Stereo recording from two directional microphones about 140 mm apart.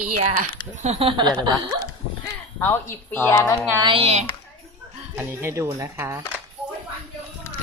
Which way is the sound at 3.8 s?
40° right (ahead or behind).